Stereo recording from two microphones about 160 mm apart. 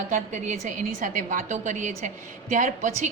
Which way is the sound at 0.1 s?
50° right (ahead or behind).